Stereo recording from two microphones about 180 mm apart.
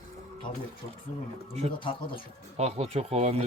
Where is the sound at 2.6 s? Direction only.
35° right (ahead or behind).